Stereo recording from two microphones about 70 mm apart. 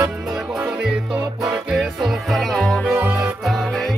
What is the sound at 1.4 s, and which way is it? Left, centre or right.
Music, centre.